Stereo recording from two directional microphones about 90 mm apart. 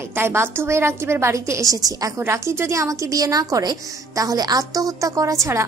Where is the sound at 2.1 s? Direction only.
30° right (ahead or behind).